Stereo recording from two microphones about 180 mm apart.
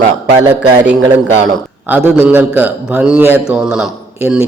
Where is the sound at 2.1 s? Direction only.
10° right (ahead or behind).